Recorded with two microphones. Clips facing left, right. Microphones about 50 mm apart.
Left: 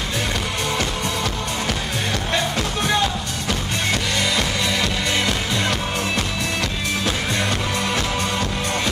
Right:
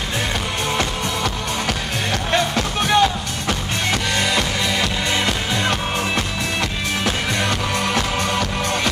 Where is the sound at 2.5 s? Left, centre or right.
Right.